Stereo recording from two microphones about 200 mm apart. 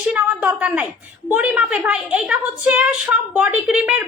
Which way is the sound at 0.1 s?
10° right (ahead or behind).